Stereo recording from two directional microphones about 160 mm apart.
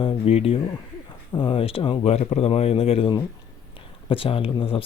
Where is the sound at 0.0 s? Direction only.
35° left (ahead or behind).